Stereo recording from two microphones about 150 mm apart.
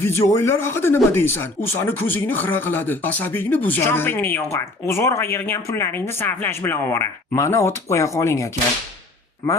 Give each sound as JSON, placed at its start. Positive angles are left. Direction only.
{"t": 0.0, "sound": "speech", "side_deg": 15}